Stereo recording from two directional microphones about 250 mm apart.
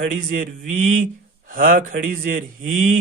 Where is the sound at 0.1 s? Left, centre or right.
Right.